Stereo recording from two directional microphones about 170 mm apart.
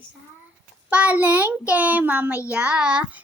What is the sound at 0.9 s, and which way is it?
A child's voice, 10° right (ahead or behind).